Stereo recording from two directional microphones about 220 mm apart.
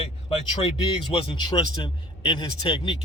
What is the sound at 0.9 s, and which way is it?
A man's voice, 20° left (ahead or behind).